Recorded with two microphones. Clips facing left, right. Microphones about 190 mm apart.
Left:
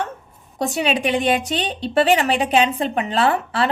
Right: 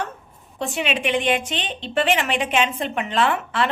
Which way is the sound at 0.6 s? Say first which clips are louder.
Left 4 dB; 40° left (ahead or behind).